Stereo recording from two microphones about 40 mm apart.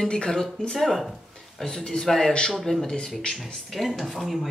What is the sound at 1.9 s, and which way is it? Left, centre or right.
Speech, centre.